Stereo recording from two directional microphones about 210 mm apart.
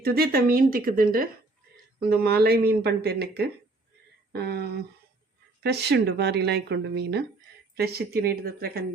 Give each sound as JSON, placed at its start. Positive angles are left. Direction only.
{"t": 0.0, "sound": "a woman's voice", "side_deg": -45}
{"t": 5.6, "sound": "a woman's voice", "side_deg": -50}